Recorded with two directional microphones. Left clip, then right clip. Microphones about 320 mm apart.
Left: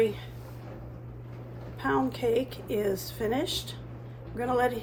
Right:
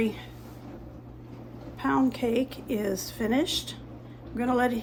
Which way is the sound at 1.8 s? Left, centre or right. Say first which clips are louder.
Right 1 dB; right.